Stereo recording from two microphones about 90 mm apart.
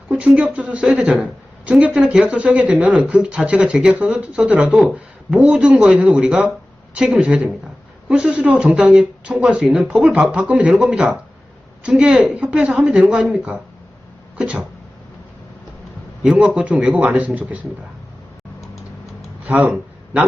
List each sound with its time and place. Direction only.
0.1 s a woman's voice: 15° right (ahead or behind)
14.3 s a sound: 15° right (ahead or behind)
16.2 s a woman's voice: 10° right (ahead or behind)
19.5 s a man's voice: 15° right (ahead or behind)